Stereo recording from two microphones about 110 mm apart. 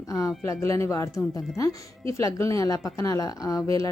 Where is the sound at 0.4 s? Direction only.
30° left (ahead or behind).